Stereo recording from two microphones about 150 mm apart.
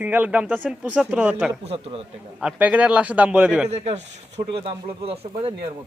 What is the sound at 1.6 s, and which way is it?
Speech, 40° right (ahead or behind).